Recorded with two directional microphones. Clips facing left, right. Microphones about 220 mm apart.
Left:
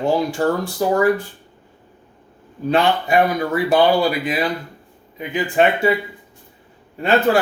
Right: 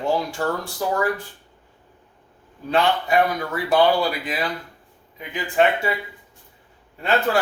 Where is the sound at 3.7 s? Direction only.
15° left (ahead or behind).